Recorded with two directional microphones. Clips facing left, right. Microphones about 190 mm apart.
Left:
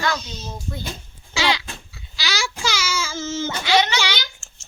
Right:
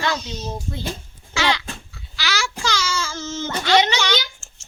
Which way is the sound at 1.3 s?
10° left (ahead or behind).